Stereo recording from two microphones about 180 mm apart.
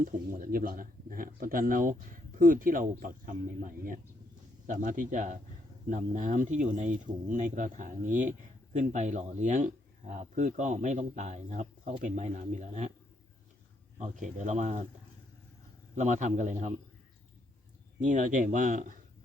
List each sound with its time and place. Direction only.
0.0 s speech: 50° right (ahead or behind)
14.0 s speech: 40° right (ahead or behind)
16.0 s speech: 40° right (ahead or behind)
18.0 s speech: 45° right (ahead or behind)